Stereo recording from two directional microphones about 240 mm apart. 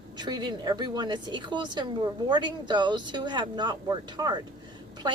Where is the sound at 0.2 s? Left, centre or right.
Centre.